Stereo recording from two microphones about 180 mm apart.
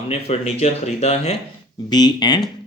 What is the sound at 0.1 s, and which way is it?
Speech, 35° left (ahead or behind).